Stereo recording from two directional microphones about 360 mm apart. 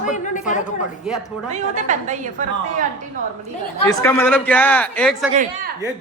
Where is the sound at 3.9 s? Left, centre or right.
Centre.